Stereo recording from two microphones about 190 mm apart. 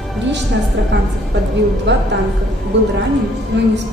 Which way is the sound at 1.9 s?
70° right (ahead or behind).